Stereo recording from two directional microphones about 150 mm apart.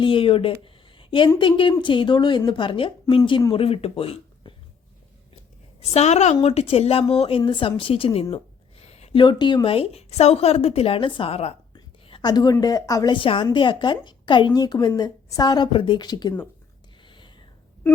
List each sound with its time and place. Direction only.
0.0 s a woman's voice: 35° left (ahead or behind)
5.8 s a woman's voice: 45° left (ahead or behind)
8.9 s a sound: 45° left (ahead or behind)
9.2 s a woman's voice: 30° left (ahead or behind)
11.7 s a woman's voice: 30° left (ahead or behind)
13.1 s a woman's voice: 35° left (ahead or behind)
17.0 s whispering: 30° left (ahead or behind)